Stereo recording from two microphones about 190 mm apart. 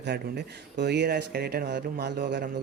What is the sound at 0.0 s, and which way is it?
Speech, 60° right (ahead or behind).